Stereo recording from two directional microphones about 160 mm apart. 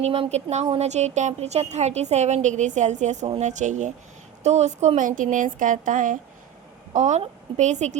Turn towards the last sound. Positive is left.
turn(degrees=-45)  # may be behind; listen again after turning